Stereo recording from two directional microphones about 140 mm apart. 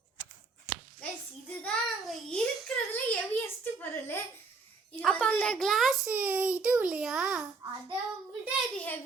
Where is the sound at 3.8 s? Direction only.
15° left (ahead or behind); by 6.1 s centre (ahead or behind).